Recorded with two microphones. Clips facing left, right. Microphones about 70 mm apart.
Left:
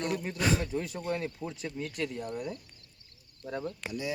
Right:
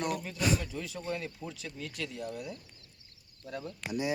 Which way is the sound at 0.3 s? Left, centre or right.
Left.